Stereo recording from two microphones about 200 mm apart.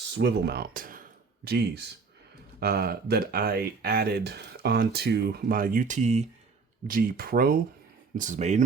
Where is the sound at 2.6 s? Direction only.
50° right (ahead or behind); by 6.3 s 35° right (ahead or behind).